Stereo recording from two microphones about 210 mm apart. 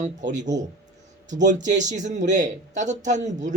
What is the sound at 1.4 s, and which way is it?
Speech, 35° right (ahead or behind).